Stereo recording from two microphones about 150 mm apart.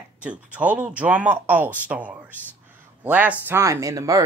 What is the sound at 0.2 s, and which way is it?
Speech, 10° right (ahead or behind).